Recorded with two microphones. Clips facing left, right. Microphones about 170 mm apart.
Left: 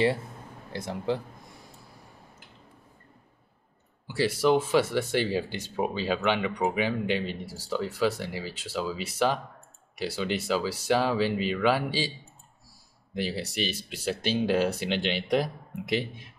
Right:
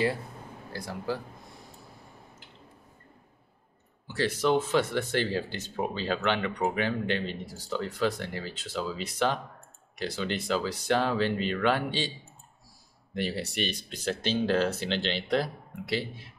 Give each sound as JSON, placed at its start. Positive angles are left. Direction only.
{"t": 0.7, "sound": "speech", "side_deg": 20}
{"t": 4.1, "sound": "speech", "side_deg": 10}
{"t": 13.1, "sound": "speech", "side_deg": 0}